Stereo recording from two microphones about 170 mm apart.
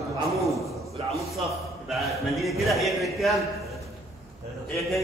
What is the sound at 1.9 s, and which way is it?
A man's voice, centre (ahead or behind).